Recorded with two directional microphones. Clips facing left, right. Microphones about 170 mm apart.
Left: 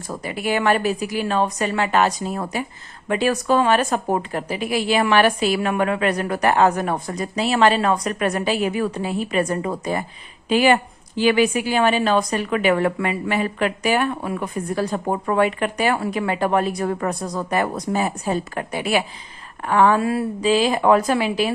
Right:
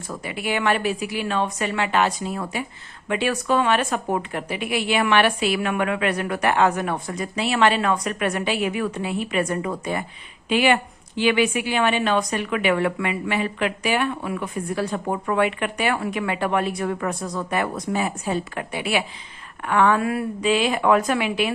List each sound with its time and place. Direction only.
0.2 s a woman's voice: 40° left (ahead or behind)